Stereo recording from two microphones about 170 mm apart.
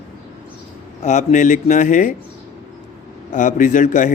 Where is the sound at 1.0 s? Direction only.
45° left (ahead or behind).